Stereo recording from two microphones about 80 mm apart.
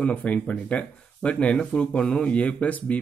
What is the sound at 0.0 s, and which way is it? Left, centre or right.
Speech, centre.